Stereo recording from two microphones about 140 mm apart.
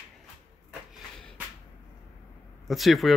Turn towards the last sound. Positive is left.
turn(degrees=0)  # may be behind; listen again after turning